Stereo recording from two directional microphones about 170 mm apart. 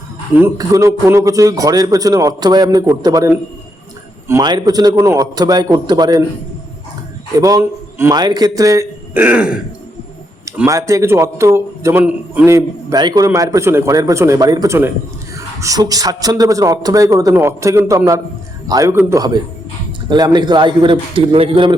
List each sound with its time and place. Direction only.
0.3 s speech: 15° right (ahead or behind)
7.3 s speech: 20° right (ahead or behind)
10.7 s a man's voice: 20° right (ahead or behind)